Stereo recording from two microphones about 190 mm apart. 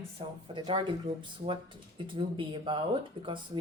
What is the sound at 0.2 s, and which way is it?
Speech, 25° right (ahead or behind).